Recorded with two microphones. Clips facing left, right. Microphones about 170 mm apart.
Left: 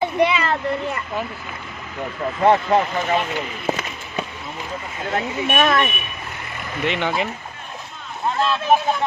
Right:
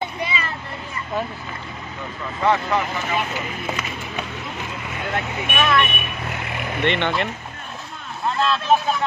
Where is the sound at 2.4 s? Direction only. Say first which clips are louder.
Left 4 dB; 50° left (ahead or behind).